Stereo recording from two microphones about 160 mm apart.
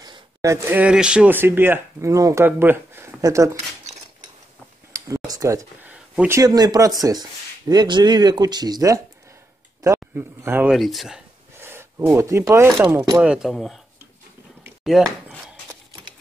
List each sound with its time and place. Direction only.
0.0 s speech: 25° right (ahead or behind)
4.9 s speech: 20° right (ahead or behind)
10.7 s speech: centre (ahead or behind)
11.5 s speech: 15° right (ahead or behind)
13.2 s speech: 5° right (ahead or behind)
14.9 s a sound: centre (ahead or behind)